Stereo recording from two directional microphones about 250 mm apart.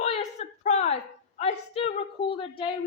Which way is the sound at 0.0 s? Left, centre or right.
Left.